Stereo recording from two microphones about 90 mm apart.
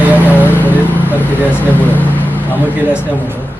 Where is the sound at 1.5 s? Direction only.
20° left (ahead or behind).